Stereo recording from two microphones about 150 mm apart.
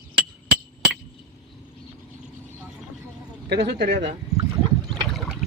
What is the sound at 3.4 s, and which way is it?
Speech, 90° right.